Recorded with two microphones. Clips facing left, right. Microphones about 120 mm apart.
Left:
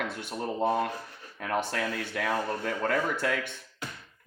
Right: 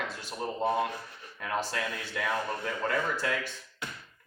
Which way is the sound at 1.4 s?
55° left (ahead or behind).